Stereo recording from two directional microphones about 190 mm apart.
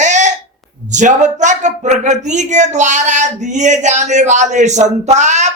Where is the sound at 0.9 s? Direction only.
40° right (ahead or behind).